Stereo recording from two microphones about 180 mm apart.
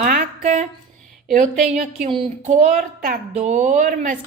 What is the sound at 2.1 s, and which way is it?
A woman's voice, 30° right (ahead or behind).